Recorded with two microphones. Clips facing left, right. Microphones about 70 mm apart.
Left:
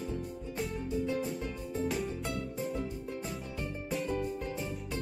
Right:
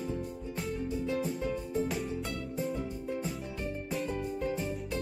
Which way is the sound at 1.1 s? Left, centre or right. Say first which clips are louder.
Right 2 dB; centre.